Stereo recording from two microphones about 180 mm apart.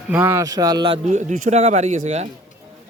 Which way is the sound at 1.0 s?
45° right (ahead or behind).